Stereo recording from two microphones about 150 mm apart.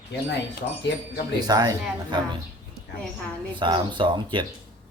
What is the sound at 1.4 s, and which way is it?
Speech, 25° right (ahead or behind).